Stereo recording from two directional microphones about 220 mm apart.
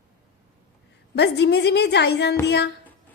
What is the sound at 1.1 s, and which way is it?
A woman's voice, 50° left (ahead or behind).